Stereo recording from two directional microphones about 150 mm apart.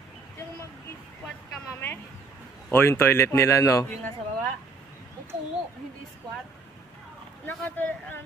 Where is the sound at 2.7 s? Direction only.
15° left (ahead or behind).